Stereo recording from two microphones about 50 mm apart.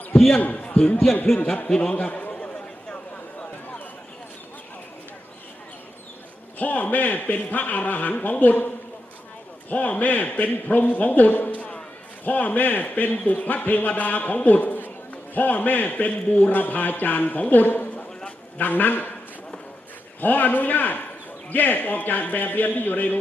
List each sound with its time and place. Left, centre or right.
0.3 s speech: left
6.6 s a man's voice: left
18.3 s a sound: left
18.7 s a man's voice: left
20.2 s a man's voice: left